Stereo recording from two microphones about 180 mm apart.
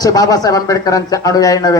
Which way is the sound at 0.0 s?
20° left (ahead or behind).